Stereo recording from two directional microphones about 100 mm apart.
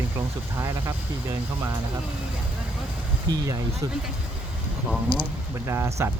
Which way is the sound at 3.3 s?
40° right (ahead or behind).